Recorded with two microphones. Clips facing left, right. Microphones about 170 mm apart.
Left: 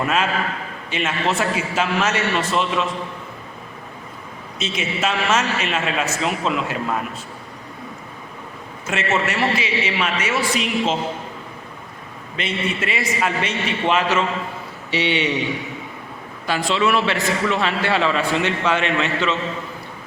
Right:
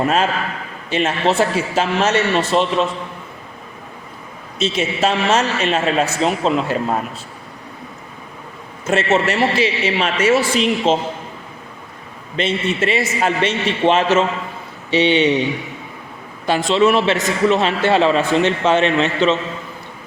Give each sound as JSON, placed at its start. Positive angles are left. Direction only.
{"t": 0.0, "sound": "a man's voice", "side_deg": -35}
{"t": 4.5, "sound": "a man's voice", "side_deg": -35}
{"t": 8.9, "sound": "a man's voice", "side_deg": -30}
{"t": 12.4, "sound": "a man's voice", "side_deg": -25}
{"t": 16.5, "sound": "a man's voice", "side_deg": -25}